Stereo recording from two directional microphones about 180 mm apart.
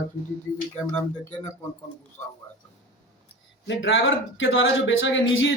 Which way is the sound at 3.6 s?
85° left.